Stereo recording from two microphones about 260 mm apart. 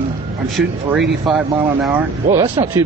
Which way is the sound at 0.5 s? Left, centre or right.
Centre.